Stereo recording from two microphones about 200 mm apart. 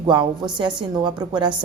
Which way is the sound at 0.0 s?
20° right (ahead or behind).